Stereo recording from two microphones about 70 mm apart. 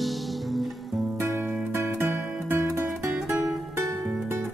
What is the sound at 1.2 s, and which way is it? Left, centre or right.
Music, right.